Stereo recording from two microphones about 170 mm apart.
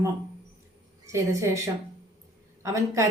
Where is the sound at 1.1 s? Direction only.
15° right (ahead or behind).